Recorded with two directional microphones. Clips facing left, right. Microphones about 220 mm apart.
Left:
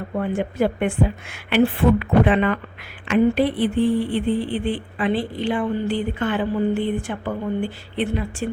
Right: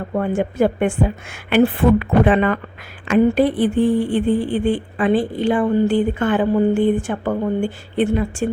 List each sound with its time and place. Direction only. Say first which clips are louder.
0.1 s speech: right 4 dB; 45° right (ahead or behind)